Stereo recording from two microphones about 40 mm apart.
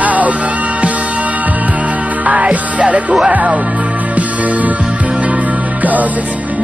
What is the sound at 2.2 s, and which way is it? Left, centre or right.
Music, right.